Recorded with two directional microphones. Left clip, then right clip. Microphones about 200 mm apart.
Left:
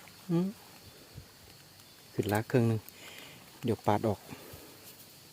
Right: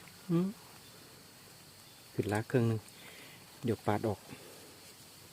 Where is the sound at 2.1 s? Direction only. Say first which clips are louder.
Left 3 dB; 10° left (ahead or behind).